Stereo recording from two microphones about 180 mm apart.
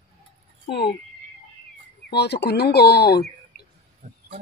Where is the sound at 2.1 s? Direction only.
65° left (ahead or behind).